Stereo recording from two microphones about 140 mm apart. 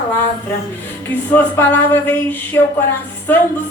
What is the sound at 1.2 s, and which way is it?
Speech, 15° left (ahead or behind).